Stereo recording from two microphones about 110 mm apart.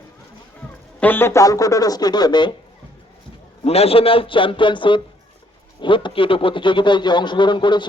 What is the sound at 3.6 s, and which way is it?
Speech, 65° left (ahead or behind).